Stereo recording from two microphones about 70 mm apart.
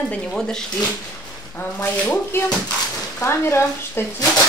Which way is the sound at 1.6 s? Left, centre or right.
Left.